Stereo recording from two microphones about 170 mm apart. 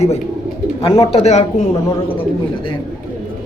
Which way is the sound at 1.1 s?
40° left (ahead or behind).